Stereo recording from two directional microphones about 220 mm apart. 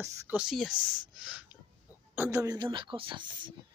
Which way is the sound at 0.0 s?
10° right (ahead or behind).